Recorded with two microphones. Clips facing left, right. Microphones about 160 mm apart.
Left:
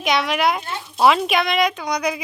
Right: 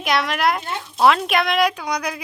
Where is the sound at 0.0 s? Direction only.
Centre (ahead or behind).